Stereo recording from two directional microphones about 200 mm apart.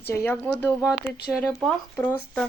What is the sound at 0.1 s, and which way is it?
Speech, 10° left (ahead or behind).